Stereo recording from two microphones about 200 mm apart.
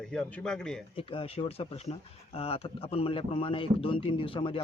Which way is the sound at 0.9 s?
25° left (ahead or behind).